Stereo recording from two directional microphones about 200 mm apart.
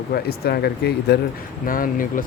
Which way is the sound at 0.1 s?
50° left (ahead or behind).